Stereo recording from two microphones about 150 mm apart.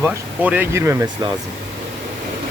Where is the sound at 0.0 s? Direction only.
10° right (ahead or behind); by 1.4 s 30° right (ahead or behind).